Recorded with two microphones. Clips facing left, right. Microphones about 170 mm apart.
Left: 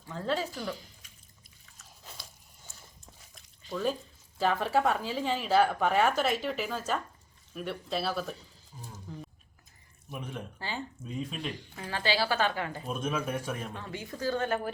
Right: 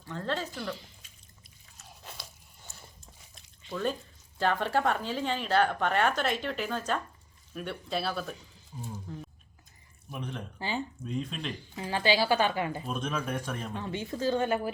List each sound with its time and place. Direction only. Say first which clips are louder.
0.1 s speech: left 2 dB; 5° left (ahead or behind)
2.1 s biting: right 3 dB; 65° right (ahead or behind)
3.7 s speech: left 1 dB; 5° left (ahead or behind)
9.1 s a sound: left 3 dB; centre (ahead or behind)
10.1 s speech: right 1 dB; 5° left (ahead or behind)
11.8 s speech: right 3 dB; 15° right (ahead or behind)
12.9 s speech: left 1 dB; 5° left (ahead or behind)
13.7 s speech: right 5 dB; 25° right (ahead or behind)